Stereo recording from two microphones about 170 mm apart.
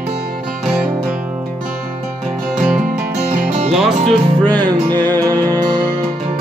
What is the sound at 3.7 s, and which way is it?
Speech, centre (ahead or behind).